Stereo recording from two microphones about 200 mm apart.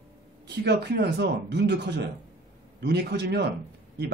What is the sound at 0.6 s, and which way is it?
Speech, 55° right (ahead or behind).